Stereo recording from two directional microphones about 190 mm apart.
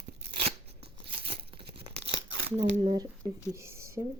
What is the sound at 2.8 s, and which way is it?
A woman's voice, 25° right (ahead or behind).